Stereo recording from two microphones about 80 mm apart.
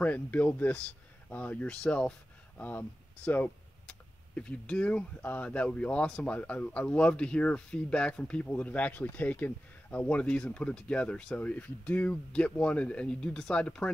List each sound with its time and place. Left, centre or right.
0.0 s speech: centre
4.4 s speech: centre